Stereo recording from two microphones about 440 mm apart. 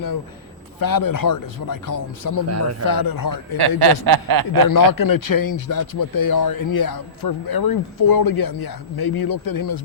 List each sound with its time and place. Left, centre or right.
0.8 s a man's voice: left
2.5 s a man's voice: right
2.8 s a man's voice: left
3.6 s speech: right
4.7 s a man's voice: left